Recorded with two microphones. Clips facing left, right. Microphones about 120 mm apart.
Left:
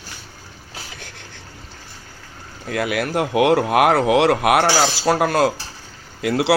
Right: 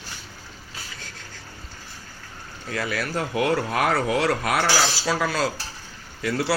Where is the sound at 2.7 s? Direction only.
60° left (ahead or behind).